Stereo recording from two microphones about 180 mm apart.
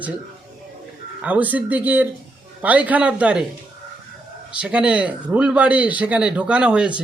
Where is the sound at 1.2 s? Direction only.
10° right (ahead or behind).